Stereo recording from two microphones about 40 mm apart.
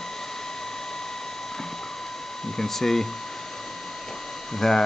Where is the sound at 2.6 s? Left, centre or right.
Centre.